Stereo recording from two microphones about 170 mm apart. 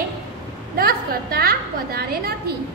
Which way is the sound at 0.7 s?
60° right (ahead or behind).